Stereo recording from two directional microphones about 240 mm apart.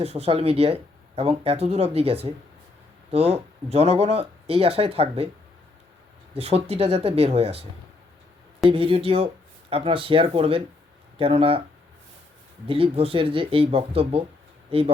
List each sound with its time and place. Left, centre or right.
0.0 s speech: right
6.3 s speech: right
8.7 s speech: right
12.6 s speech: right